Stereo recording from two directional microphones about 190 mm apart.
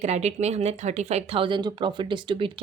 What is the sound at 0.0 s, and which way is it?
Speech, 35° right (ahead or behind).